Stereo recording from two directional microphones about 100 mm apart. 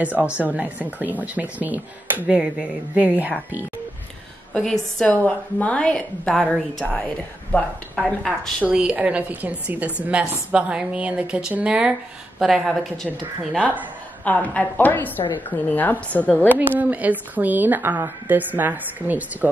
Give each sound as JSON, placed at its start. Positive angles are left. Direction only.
{"t": 0.0, "sound": "a woman's voice", "side_deg": -15}
{"t": 4.6, "sound": "a woman's voice", "side_deg": 10}
{"t": 7.5, "sound": "a woman's voice", "side_deg": 20}
{"t": 7.9, "sound": "a woman's voice", "side_deg": 5}
{"t": 8.6, "sound": "a woman's voice", "side_deg": -10}
{"t": 14.2, "sound": "a woman's voice", "side_deg": 15}
{"t": 16.5, "sound": "a woman's voice", "side_deg": -15}